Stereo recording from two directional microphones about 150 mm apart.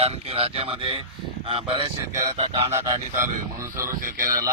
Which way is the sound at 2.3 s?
40° right (ahead or behind).